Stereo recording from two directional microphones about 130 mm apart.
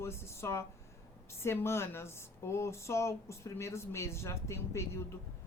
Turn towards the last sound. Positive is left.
turn(degrees=20)  # may be behind; listen again after turning